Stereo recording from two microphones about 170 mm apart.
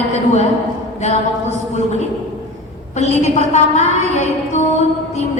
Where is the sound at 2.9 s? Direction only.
40° left (ahead or behind).